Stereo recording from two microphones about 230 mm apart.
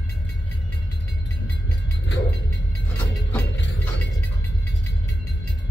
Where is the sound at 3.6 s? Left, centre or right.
Left.